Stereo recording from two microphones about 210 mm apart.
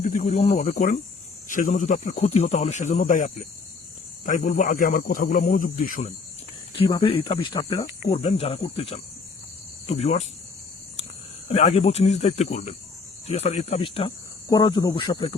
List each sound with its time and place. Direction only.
0.0 s speech: 35° left (ahead or behind)
6.7 s speech: 25° left (ahead or behind)
11.4 s speech: 30° left (ahead or behind)